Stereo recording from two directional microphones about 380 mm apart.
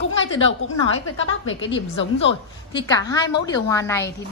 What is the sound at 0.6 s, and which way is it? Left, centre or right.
A woman's voice, left.